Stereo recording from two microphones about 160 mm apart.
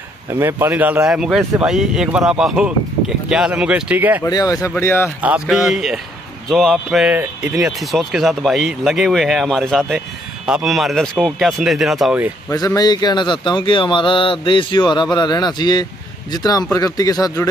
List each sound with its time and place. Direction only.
0.3 s speech: 15° right (ahead or behind)
4.2 s speech: 25° left (ahead or behind)
5.2 s speech: 5° right (ahead or behind)
12.4 s speech: 20° left (ahead or behind)